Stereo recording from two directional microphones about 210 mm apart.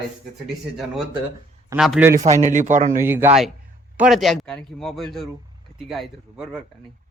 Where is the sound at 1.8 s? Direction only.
5° right (ahead or behind).